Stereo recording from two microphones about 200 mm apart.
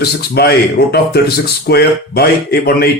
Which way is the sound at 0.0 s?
55° left (ahead or behind).